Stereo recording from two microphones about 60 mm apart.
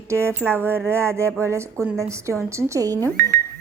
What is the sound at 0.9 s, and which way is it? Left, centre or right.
A woman's voice, right.